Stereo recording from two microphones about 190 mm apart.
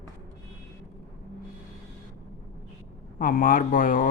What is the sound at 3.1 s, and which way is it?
Speech, 45° left (ahead or behind).